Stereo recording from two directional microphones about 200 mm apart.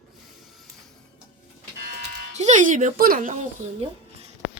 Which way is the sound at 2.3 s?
35° right (ahead or behind).